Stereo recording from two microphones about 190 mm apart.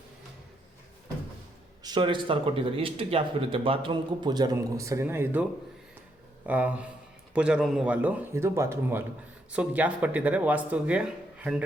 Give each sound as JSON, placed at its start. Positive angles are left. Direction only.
{"t": 1.8, "sound": "speech", "side_deg": -25}